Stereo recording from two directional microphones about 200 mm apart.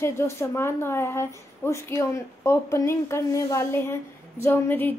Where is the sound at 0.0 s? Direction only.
15° left (ahead or behind).